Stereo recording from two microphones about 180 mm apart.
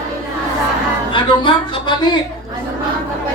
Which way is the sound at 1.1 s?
25° left (ahead or behind).